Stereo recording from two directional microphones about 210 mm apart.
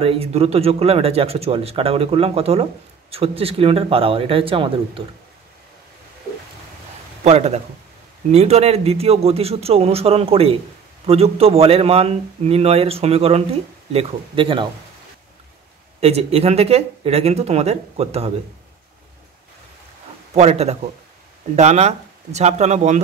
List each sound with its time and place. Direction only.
0.0 s speech: 30° right (ahead or behind)
7.2 s speech: 30° right (ahead or behind)
16.0 s speech: 30° right (ahead or behind)
20.3 s speech: 30° right (ahead or behind)